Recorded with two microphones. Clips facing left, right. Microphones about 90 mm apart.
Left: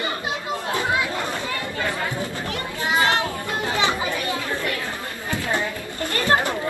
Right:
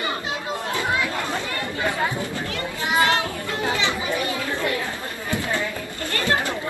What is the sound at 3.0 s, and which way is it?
Child singing, 25° left (ahead or behind).